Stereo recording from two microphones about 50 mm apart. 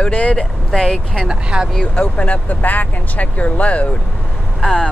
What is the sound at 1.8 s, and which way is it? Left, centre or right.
Speech, left.